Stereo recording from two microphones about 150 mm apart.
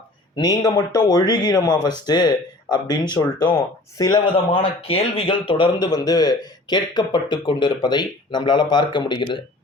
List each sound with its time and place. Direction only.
0.6 s speech: 25° left (ahead or behind)